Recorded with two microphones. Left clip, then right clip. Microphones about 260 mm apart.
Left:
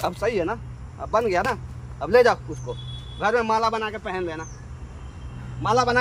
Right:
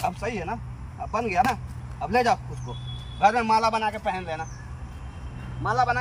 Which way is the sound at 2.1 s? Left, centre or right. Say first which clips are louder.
Left 5 dB; centre.